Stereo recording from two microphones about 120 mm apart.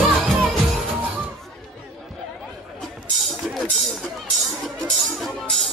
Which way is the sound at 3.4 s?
5° right (ahead or behind).